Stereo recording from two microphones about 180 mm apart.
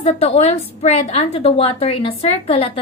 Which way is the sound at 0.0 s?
35° left (ahead or behind).